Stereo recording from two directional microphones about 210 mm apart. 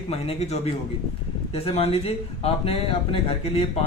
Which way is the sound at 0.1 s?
30° left (ahead or behind).